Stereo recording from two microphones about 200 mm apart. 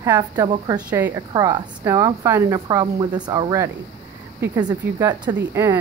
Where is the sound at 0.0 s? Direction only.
15° right (ahead or behind).